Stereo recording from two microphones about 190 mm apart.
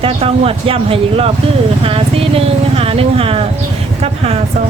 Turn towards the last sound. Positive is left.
turn(degrees=-30)  # may be behind; listen again after turning